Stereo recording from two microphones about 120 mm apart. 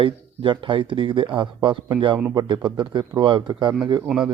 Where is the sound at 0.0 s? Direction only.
45° right (ahead or behind).